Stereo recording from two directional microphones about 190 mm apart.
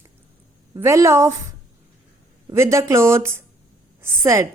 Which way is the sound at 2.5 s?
15° right (ahead or behind).